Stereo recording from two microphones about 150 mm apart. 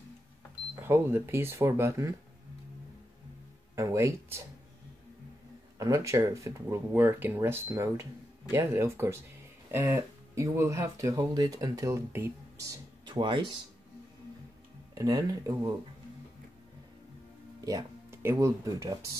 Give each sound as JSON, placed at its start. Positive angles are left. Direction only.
{"t": 0.7, "sound": "speech", "side_deg": -15}
{"t": 3.7, "sound": "speech", "side_deg": -20}
{"t": 5.8, "sound": "speech", "side_deg": -20}
{"t": 15.0, "sound": "speech", "side_deg": -25}
{"t": 17.6, "sound": "speech", "side_deg": -25}